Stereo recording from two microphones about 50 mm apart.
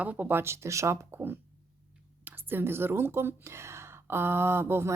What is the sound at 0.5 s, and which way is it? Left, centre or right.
Speech, right.